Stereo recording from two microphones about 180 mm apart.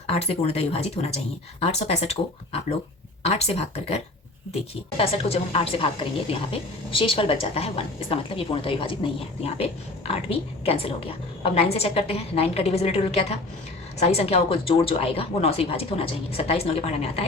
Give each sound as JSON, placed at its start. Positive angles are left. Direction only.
{"t": 0.1, "sound": "a woman's voice", "side_deg": 35}
{"t": 10.1, "sound": "a woman's voice", "side_deg": 35}